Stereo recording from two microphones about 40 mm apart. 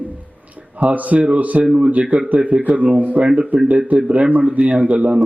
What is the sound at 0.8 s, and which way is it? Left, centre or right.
Speech, right.